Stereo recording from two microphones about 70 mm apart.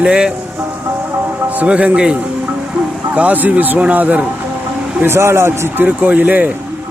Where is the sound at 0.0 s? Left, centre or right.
Centre.